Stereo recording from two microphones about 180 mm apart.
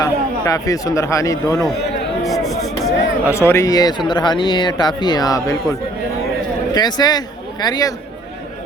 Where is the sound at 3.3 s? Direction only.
15° left (ahead or behind).